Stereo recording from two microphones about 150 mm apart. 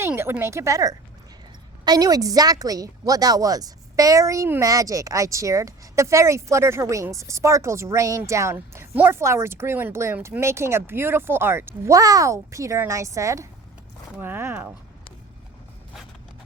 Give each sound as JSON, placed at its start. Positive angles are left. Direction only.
{"t": 0.0, "sound": "a woman's voice", "side_deg": -15}